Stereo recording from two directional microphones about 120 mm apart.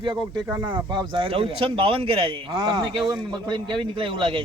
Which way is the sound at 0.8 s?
40° right (ahead or behind).